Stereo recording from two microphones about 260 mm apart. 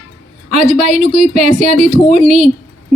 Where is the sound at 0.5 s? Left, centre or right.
Right.